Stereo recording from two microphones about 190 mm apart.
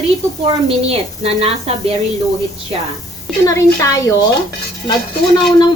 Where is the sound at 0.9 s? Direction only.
30° right (ahead or behind).